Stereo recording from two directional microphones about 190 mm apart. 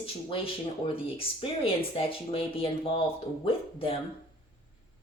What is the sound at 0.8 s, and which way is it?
Speech, 30° left (ahead or behind).